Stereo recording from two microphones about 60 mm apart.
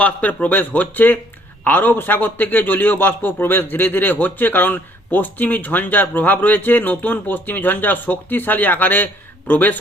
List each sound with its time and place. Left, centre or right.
0.0 s a man's voice: left